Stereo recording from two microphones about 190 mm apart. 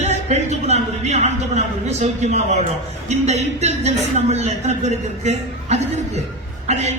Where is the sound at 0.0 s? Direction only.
35° right (ahead or behind).